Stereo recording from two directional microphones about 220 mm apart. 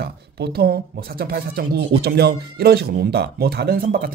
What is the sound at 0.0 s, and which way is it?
Speech, 45° right (ahead or behind).